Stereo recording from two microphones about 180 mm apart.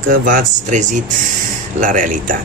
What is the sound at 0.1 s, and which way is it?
Speech, 50° right (ahead or behind).